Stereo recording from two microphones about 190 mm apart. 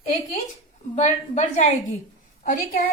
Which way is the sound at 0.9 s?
40° left (ahead or behind).